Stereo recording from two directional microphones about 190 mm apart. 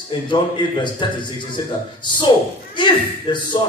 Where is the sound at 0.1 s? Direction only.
25° left (ahead or behind).